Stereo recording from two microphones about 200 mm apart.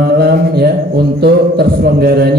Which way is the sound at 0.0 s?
50° right (ahead or behind).